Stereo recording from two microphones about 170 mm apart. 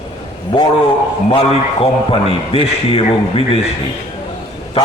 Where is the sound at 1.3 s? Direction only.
30° left (ahead or behind).